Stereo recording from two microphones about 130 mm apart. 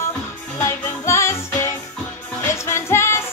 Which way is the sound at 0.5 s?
20° left (ahead or behind).